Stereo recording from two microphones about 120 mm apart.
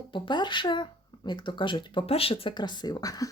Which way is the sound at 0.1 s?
40° left (ahead or behind).